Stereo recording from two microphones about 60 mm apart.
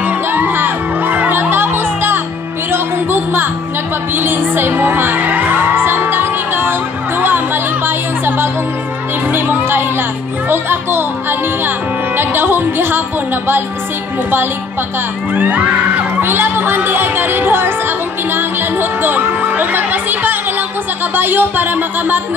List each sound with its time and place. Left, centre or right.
0.0 s music: right
15.3 s music: right
16.2 s music: right
21.1 s speech: right